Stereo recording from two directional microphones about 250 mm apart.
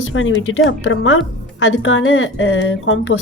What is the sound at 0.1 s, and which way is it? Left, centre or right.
Speech, left.